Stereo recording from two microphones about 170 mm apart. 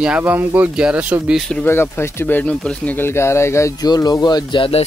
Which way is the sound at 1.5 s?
10° left (ahead or behind).